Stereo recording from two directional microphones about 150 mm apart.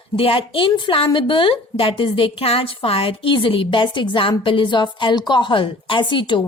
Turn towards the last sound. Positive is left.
turn(degrees=35)  # may be behind; listen again after turning